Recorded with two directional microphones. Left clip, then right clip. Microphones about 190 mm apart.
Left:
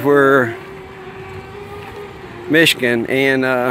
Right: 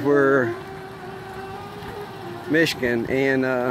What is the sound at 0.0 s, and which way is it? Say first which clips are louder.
Speech: left 6 dB; 15° left (ahead or behind).